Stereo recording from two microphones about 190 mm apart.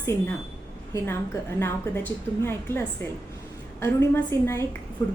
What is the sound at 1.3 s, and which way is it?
A woman's voice, 15° left (ahead or behind).